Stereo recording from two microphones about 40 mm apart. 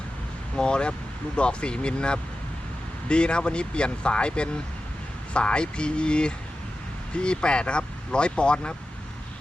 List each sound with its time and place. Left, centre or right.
0.5 s speech: left